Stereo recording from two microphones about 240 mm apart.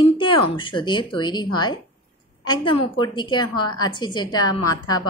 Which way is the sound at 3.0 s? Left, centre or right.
Centre.